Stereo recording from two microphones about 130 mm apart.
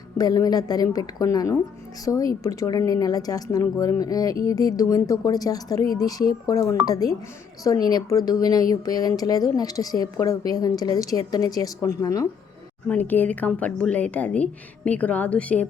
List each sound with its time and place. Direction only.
0.2 s a woman's voice: 30° left (ahead or behind)
12.9 s a woman's voice: 15° left (ahead or behind)